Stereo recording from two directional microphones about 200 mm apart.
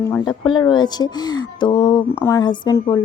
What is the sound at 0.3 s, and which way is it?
A woman's voice, 25° left (ahead or behind).